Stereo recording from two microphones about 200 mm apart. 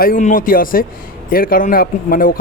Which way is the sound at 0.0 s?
40° left (ahead or behind).